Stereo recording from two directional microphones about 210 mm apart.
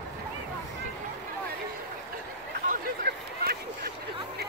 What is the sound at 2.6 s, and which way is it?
Vehicle, 45° right (ahead or behind).